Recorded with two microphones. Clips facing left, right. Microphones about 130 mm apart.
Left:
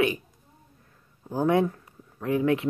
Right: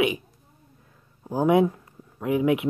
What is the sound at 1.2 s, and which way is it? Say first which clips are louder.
Speech: right 3 dB; 15° right (ahead or behind).